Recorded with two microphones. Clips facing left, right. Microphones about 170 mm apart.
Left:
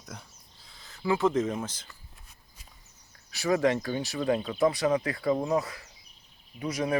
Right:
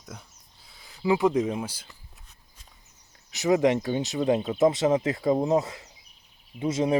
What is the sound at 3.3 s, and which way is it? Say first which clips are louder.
Speech: right 3 dB; 20° right (ahead or behind).